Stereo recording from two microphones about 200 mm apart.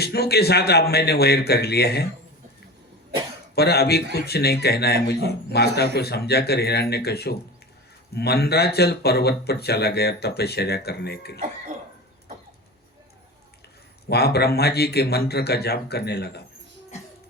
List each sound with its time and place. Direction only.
0.0 s speech: 55° left (ahead or behind)
3.5 s speech: 55° left (ahead or behind)
14.1 s speech: 55° left (ahead or behind)